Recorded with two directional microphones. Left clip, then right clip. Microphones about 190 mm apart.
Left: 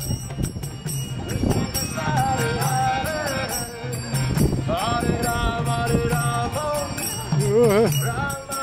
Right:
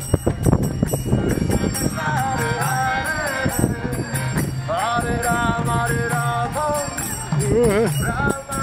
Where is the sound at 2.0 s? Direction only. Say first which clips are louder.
Even; 25° left (ahead or behind).